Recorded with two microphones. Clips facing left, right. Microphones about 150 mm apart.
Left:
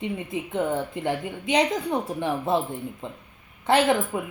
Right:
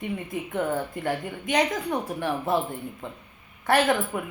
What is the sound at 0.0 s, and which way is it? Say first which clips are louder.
A woman's voice: left 1 dB; 25° left (ahead or behind).